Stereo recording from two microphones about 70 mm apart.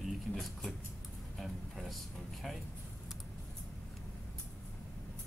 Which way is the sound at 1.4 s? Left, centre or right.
Centre.